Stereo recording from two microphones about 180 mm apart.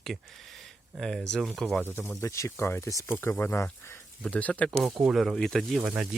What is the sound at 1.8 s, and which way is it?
Speech, 10° left (ahead or behind).